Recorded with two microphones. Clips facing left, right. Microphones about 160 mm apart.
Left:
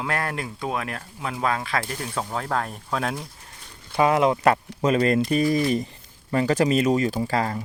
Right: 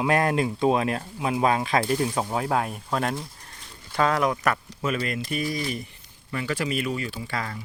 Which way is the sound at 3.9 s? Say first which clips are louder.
Left 4 dB; 15° left (ahead or behind).